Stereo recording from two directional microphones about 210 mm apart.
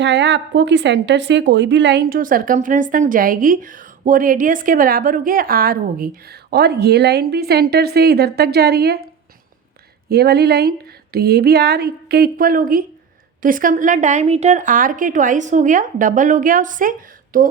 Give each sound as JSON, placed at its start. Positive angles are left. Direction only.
{"t": 0.0, "sound": "a woman's voice", "side_deg": -55}
{"t": 10.1, "sound": "a woman's voice", "side_deg": -50}